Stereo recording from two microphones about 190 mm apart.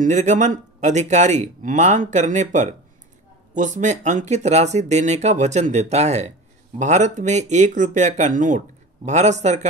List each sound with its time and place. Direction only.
0.0 s speech: 40° right (ahead or behind)